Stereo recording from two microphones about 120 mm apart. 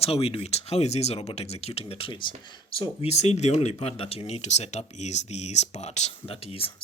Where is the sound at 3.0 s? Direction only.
65° left (ahead or behind).